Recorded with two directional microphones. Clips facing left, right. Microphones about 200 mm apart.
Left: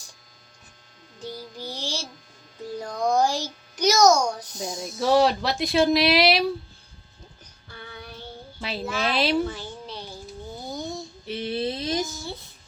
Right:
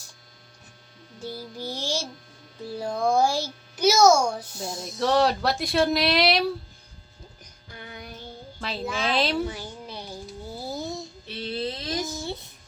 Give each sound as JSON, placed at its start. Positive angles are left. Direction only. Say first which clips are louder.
{"t": 1.2, "sound": "child singing", "louder": "right 1 dB", "side_deg": -10}
{"t": 1.5, "sound": "music", "louder": "right 4 dB", "side_deg": 15}
{"t": 2.6, "sound": "a child's voice", "louder": "right 1 dB", "side_deg": -10}
{"t": 4.4, "sound": "speech", "louder": "left 1 dB", "side_deg": 15}
{"t": 4.8, "sound": "speech", "louder": "left 2 dB", "side_deg": 0}
{"t": 7.7, "sound": "music", "louder": "even", "side_deg": -15}
{"t": 8.6, "sound": "speech", "louder": "left 1 dB", "side_deg": 5}
{"t": 9.5, "sound": "a sound", "louder": "left 1 dB", "side_deg": -10}
{"t": 11.3, "sound": "a sound", "louder": "left 3 dB", "side_deg": 20}